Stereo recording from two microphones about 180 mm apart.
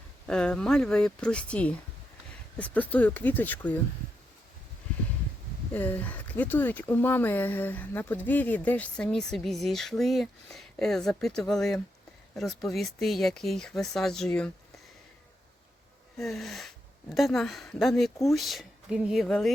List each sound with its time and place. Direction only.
0.3 s speech: 5° left (ahead or behind)
5.7 s speech: 10° left (ahead or behind)
16.1 s speech: centre (ahead or behind)